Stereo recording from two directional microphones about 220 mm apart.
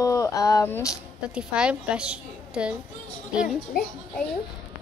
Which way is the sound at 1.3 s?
5° right (ahead or behind).